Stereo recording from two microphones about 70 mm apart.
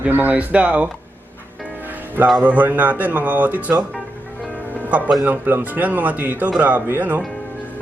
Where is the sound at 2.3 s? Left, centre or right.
Right.